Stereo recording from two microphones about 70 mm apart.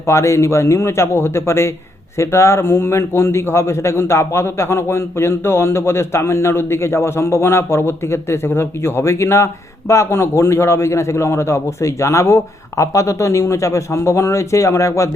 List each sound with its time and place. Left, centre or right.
0.0 s a man's voice: left